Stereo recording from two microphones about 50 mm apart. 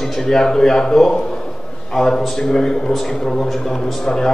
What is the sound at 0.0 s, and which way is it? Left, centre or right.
A man's voice, centre.